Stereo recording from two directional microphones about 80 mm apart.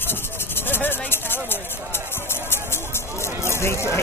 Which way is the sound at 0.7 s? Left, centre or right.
Left.